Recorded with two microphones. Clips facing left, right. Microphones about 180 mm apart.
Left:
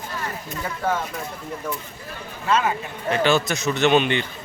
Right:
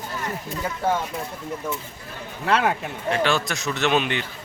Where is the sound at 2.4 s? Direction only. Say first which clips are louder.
Even; 70° right (ahead or behind).